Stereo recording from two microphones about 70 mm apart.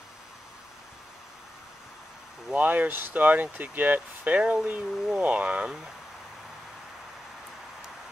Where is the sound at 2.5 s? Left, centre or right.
Right.